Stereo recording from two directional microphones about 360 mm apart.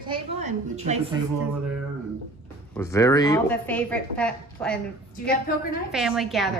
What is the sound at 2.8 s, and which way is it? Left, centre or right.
Speech, centre.